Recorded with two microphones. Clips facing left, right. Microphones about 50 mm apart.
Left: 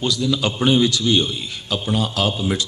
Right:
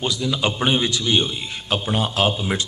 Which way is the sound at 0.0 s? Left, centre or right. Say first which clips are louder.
Left 2 dB; right.